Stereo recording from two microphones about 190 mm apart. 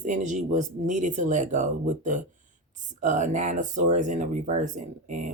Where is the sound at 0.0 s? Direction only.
40° right (ahead or behind).